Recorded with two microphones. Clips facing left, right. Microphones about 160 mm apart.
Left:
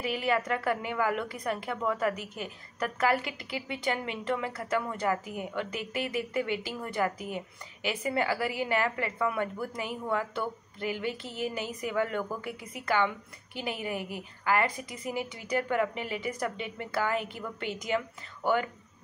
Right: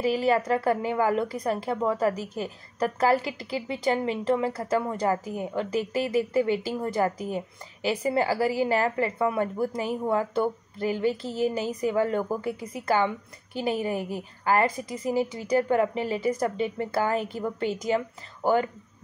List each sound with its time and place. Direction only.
0.0 s a woman's voice: 35° right (ahead or behind)